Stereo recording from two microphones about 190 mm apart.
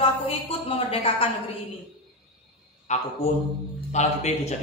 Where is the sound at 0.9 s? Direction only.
30° left (ahead or behind).